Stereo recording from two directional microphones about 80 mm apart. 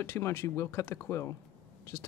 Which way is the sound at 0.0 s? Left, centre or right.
Left.